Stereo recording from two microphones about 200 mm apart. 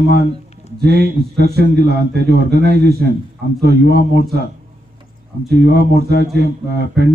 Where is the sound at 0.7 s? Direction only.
50° right (ahead or behind).